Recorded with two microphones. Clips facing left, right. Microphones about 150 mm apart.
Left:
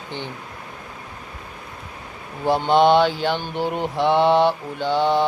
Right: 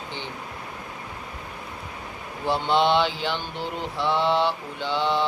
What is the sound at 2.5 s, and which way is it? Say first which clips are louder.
Speech: left 6 dB; 50° left (ahead or behind).